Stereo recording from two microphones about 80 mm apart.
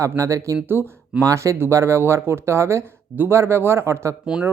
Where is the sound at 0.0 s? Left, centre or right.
Right.